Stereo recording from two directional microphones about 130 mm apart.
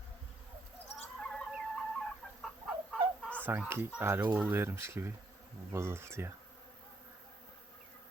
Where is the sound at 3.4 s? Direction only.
15° right (ahead or behind).